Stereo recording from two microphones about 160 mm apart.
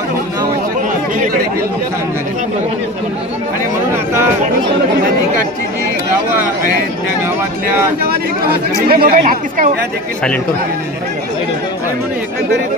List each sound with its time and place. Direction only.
8.8 s speech: 70° right (ahead or behind)